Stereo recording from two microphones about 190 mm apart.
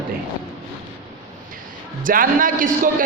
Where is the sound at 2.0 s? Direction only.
45° right (ahead or behind).